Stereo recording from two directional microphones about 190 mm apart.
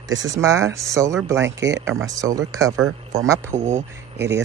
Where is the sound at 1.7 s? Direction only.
90° right.